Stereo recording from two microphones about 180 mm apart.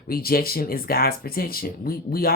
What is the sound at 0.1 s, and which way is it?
Speech, 55° left (ahead or behind).